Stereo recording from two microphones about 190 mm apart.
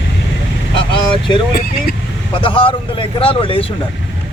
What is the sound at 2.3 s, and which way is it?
Speech, 25° left (ahead or behind).